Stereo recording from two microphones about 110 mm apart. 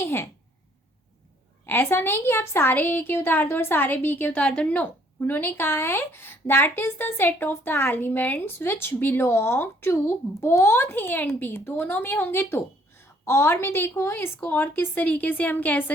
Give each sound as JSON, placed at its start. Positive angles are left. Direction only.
{"t": 0.0, "sound": "a woman's voice", "side_deg": 20}
{"t": 1.6, "sound": "a woman's voice", "side_deg": 20}
{"t": 4.8, "sound": "a woman's voice", "side_deg": 20}